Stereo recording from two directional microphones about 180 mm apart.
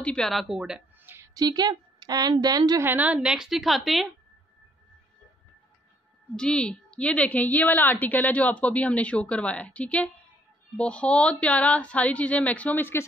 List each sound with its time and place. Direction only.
0.0 s a woman's voice: 5° left (ahead or behind); by 2.9 s 20° right (ahead or behind)
2.9 s a woman's voice: 10° right (ahead or behind)
6.3 s a woman's voice: 5° left (ahead or behind)